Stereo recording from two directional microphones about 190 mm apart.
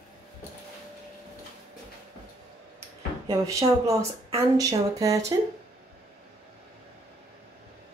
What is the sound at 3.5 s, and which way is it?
Speech, 15° right (ahead or behind).